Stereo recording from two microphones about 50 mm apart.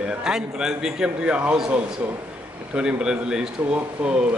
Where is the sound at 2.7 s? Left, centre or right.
Centre.